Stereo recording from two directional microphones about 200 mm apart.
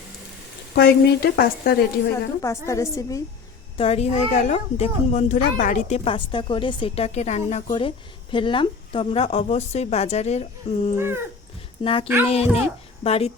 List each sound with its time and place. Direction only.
0.8 s speech: 50° left (ahead or behind)
2.4 s a woman's voice: 15° left (ahead or behind)
3.8 s speech: 30° left (ahead or behind)
10.9 s speech: 10° right (ahead or behind)
11.8 s a child's voice: 25° left (ahead or behind)